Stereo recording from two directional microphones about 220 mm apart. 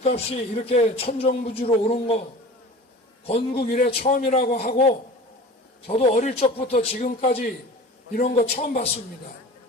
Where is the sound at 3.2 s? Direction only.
25° left (ahead or behind).